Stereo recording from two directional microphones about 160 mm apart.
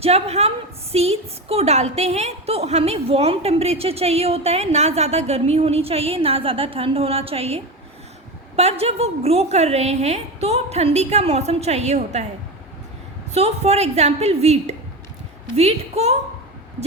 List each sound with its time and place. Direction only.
0.0 s a woman's voice: 40° right (ahead or behind)
8.8 s a woman's voice: 40° right (ahead or behind)
13.3 s a woman's voice: 40° right (ahead or behind)